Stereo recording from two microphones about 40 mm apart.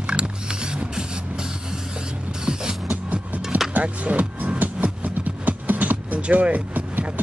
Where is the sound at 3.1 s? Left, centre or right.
Right.